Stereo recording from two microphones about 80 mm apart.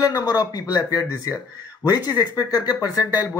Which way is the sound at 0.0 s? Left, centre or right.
Left.